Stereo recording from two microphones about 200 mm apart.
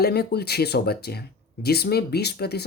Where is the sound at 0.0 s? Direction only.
55° left (ahead or behind).